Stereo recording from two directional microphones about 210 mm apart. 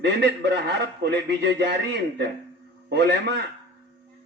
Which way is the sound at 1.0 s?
55° right (ahead or behind).